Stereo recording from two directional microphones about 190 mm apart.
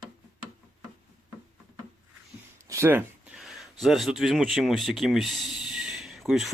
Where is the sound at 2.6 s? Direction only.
15° right (ahead or behind).